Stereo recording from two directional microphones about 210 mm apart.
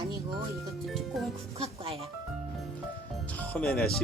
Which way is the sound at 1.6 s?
30° right (ahead or behind).